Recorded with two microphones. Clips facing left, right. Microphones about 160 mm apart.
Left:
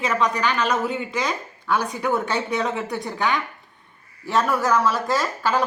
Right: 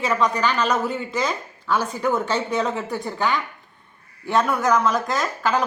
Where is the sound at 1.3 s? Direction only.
15° left (ahead or behind).